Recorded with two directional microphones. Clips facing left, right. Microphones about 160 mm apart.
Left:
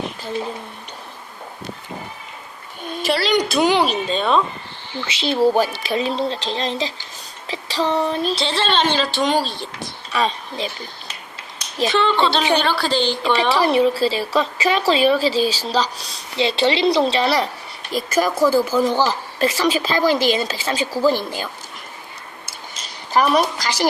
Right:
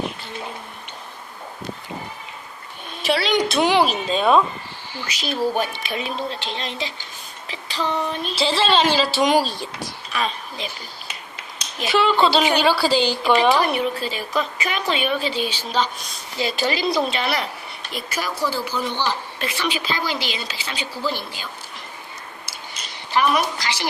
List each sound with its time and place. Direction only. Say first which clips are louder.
3.0 s a woman's voice: left 1 dB; centre (ahead or behind)
5.0 s a woman's voice: left 6 dB; 30° left (ahead or behind)
7.4 s child singing: left 4 dB; 35° left (ahead or behind)
8.4 s a woman's voice: right 1 dB; 5° right (ahead or behind)
10.1 s a woman's voice: left 5 dB; 35° left (ahead or behind)
11.9 s a woman's voice: right 1 dB; 5° right (ahead or behind)
13.6 s a woman's voice: left 6 dB; 30° left (ahead or behind)
17.9 s speech: left 9 dB; 45° left (ahead or behind)
23.1 s a woman's voice: left 3 dB; 40° left (ahead or behind)